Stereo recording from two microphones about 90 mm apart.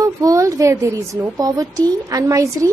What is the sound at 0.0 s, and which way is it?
A woman's voice, 40° right (ahead or behind).